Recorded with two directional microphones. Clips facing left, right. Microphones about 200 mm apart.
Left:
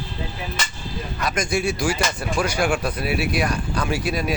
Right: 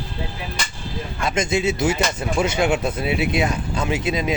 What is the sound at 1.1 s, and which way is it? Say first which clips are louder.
Speech: right 2 dB; 25° right (ahead or behind).